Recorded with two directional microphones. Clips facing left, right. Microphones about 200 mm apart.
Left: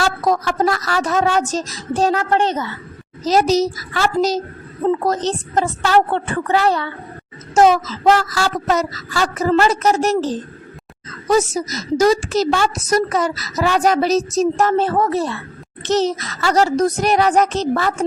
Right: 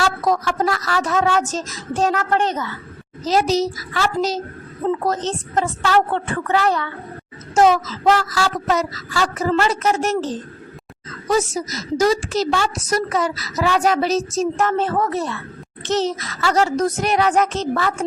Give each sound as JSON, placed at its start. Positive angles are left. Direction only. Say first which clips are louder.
{"t": 0.0, "sound": "a woman's voice", "louder": "left 1 dB", "side_deg": 40}
{"t": 3.2, "sound": "a woman's voice", "louder": "left 3 dB", "side_deg": 40}
{"t": 8.4, "sound": "a woman's voice", "louder": "left 1 dB", "side_deg": 45}